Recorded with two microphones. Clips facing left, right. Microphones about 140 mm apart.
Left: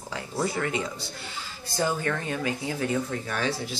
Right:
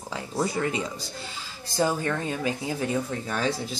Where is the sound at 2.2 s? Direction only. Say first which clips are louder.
Right 1 dB; 20° right (ahead or behind).